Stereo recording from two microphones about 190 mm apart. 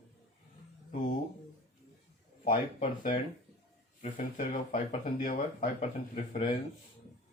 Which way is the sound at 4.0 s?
45° left (ahead or behind).